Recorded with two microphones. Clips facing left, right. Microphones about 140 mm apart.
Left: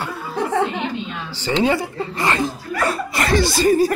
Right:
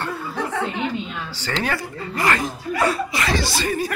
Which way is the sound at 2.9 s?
50° left (ahead or behind).